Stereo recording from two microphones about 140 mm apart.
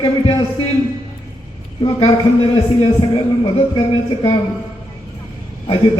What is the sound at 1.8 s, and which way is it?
Speech, 35° left (ahead or behind).